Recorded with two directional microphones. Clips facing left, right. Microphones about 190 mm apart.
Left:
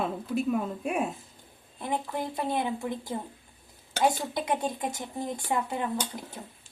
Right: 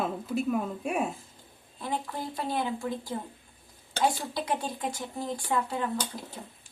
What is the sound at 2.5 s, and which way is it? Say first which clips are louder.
Speech: right 1 dB; 20° left (ahead or behind).